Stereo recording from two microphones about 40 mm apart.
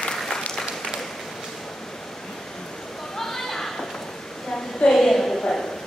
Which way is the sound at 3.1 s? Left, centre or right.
Centre.